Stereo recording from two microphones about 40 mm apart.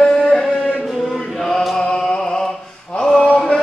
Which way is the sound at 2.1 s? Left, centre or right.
Centre.